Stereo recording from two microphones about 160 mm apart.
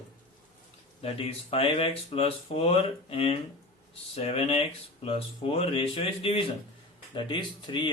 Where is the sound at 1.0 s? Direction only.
35° left (ahead or behind).